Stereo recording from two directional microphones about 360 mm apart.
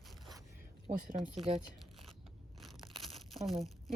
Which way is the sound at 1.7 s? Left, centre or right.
Centre.